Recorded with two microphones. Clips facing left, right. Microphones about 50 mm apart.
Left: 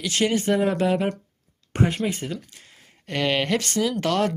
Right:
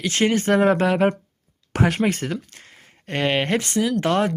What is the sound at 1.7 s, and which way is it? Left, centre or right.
Speech, right.